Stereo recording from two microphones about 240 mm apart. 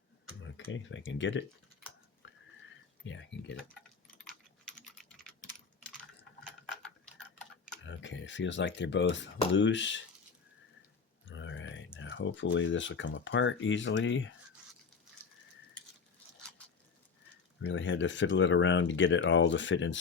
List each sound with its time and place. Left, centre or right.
0.5 s speech: left
2.2 s a sound: left
3.1 s speech: left
7.9 s speech: left
11.3 s grunt: left
11.9 s speech: left
17.6 s speech: left